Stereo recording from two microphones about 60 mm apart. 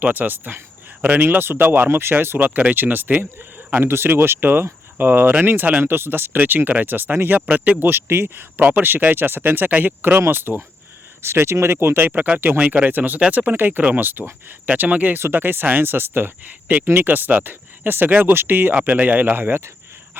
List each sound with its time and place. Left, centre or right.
0.0 s speech: right
2.4 s speech: right
12.1 s speech: right
18.7 s speech: right